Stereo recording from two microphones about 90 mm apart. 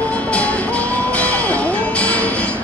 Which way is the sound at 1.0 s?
15° left (ahead or behind).